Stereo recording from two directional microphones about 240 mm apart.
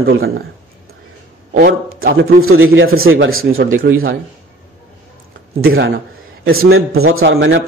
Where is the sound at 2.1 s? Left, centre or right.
Right.